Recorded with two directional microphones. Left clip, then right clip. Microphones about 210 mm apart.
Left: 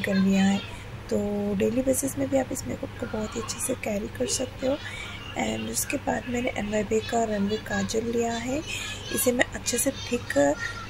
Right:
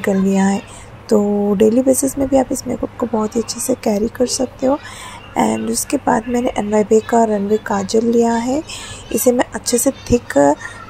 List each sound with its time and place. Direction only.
0.0 s speech: 25° right (ahead or behind)